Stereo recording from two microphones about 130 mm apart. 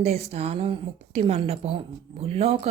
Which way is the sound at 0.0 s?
55° right (ahead or behind).